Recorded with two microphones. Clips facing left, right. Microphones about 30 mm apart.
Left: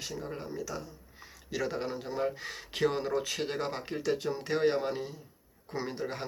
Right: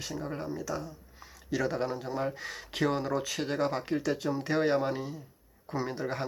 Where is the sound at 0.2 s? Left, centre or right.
Centre.